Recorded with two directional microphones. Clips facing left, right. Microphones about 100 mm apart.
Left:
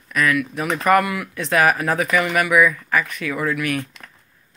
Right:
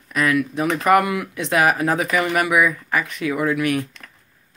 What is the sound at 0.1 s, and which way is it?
Speech, 25° right (ahead or behind).